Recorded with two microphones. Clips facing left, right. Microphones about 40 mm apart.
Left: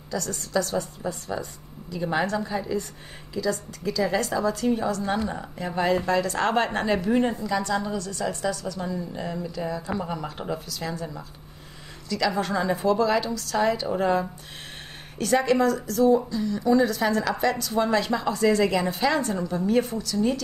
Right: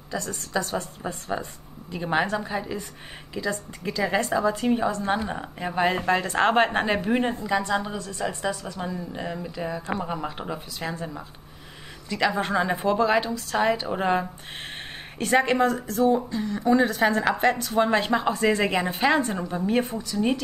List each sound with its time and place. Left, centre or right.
0.1 s a woman's voice: right
12.1 s a woman's voice: right